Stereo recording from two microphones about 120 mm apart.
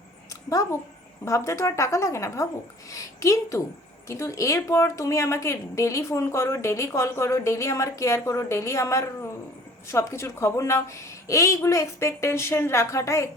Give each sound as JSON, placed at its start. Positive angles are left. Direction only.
{"t": 0.5, "sound": "speech", "side_deg": 30}